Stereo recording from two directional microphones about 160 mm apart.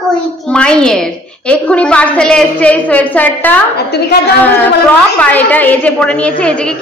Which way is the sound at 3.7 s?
90° left.